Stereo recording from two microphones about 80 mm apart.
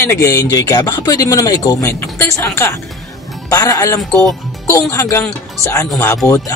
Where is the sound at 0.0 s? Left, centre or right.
Left.